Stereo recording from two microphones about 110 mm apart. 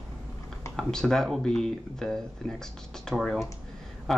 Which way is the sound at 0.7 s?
5° left (ahead or behind).